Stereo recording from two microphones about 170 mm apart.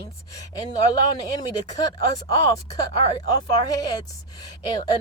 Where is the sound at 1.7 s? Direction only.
20° left (ahead or behind).